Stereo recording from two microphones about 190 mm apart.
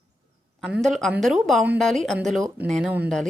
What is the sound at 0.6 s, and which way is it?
A woman's voice, centre (ahead or behind).